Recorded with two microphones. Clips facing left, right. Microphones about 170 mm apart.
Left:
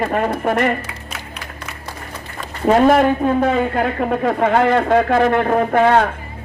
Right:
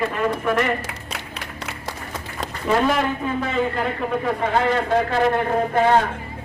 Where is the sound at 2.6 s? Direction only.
55° left (ahead or behind).